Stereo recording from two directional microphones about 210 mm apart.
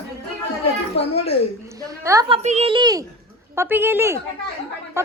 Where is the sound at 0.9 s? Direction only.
30° left (ahead or behind).